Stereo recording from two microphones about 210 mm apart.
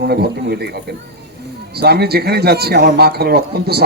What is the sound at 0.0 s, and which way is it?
Speech, 50° right (ahead or behind).